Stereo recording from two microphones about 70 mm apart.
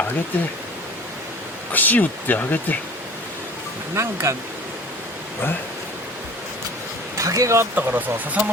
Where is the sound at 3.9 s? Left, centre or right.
Right.